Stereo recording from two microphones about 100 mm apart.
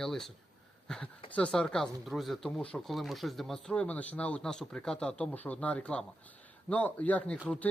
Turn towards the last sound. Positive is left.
turn(degrees=15)  # may be behind; listen again after turning